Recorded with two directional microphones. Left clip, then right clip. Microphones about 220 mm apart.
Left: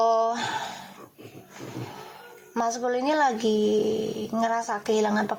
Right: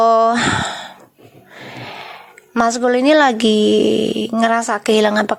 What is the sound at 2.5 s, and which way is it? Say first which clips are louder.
Speech: right 11 dB; 35° right (ahead or behind).